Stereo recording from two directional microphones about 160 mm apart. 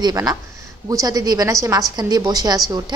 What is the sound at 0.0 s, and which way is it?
A woman's voice, 20° right (ahead or behind).